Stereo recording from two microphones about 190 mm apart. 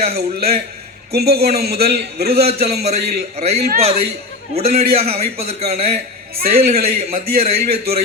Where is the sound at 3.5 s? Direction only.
55° right (ahead or behind).